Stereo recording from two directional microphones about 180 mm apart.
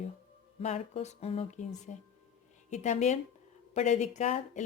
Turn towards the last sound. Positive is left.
turn(degrees=40)  # may be behind; listen again after turning